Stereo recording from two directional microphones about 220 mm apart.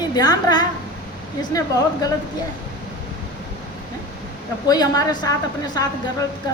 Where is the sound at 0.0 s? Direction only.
20° left (ahead or behind).